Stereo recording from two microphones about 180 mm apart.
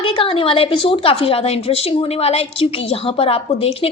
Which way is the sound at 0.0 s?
30° left (ahead or behind).